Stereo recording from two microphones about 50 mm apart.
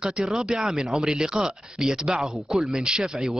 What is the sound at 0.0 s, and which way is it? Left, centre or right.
Speech, centre.